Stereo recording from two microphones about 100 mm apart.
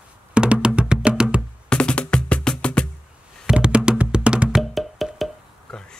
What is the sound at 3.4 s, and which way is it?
Music, 10° right (ahead or behind).